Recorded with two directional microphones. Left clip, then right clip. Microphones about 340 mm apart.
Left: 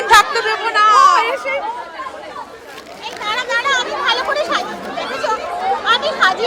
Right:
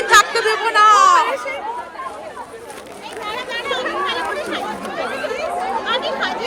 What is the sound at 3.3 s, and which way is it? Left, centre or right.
Chatter, centre.